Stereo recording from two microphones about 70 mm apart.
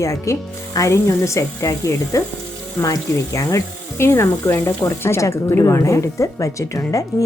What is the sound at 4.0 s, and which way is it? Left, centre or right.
Speech, left.